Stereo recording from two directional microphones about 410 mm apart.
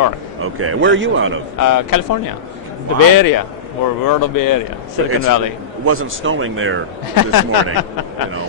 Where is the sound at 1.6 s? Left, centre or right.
Left.